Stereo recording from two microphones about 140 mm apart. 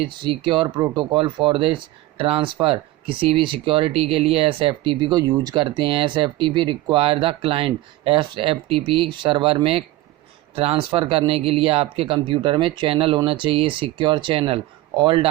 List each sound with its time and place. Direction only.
0.0 s speech: 35° right (ahead or behind)